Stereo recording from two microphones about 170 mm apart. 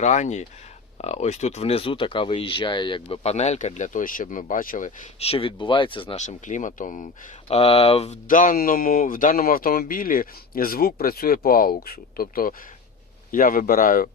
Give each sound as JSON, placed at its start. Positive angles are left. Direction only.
{"t": 0.0, "sound": "speech", "side_deg": 45}
{"t": 5.2, "sound": "speech", "side_deg": 35}
{"t": 6.2, "sound": "speech", "side_deg": 45}
{"t": 7.4, "sound": "speech", "side_deg": 35}